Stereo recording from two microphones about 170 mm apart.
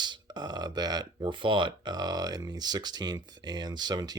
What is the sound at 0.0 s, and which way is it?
Speech, 25° right (ahead or behind).